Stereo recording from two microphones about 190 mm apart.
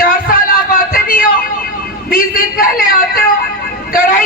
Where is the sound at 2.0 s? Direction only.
50° left (ahead or behind).